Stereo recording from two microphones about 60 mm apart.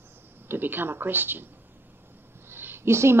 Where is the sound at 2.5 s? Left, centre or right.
Right.